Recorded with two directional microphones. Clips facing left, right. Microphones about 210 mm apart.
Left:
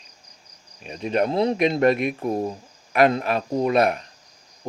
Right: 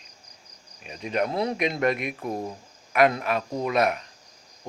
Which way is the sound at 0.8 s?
35° left (ahead or behind).